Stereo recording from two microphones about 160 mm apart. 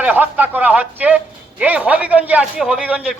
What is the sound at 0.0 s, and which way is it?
A man's voice, 10° right (ahead or behind).